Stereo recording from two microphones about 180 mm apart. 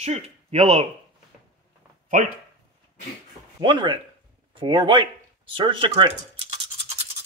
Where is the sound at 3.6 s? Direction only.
25° right (ahead or behind).